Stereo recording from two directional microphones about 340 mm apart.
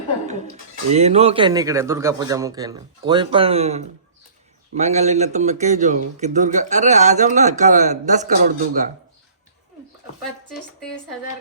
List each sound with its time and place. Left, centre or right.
0.9 s a man's voice: centre